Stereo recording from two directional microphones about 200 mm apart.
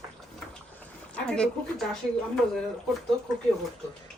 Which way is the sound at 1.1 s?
5° left (ahead or behind).